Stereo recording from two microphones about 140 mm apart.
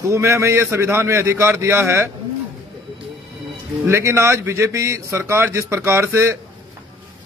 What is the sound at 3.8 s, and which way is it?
A man's voice, 20° right (ahead or behind).